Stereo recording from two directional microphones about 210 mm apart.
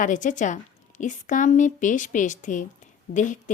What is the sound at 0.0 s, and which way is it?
Speech, 35° left (ahead or behind).